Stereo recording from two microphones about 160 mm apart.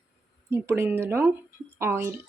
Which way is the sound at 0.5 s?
15° right (ahead or behind).